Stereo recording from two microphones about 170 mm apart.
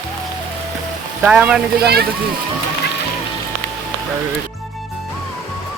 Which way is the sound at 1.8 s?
70° right (ahead or behind).